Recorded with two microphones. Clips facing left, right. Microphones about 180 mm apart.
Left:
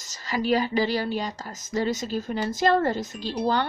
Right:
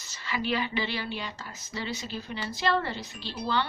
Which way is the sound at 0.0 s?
40° left (ahead or behind).